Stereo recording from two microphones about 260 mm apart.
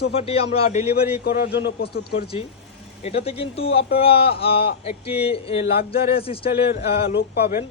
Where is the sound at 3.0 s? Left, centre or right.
Left.